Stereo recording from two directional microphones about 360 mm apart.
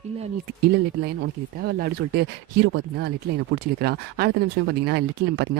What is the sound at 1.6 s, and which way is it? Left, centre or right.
Speech, right.